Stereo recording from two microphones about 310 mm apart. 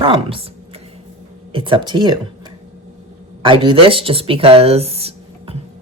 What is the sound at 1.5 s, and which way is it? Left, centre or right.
Speech, centre.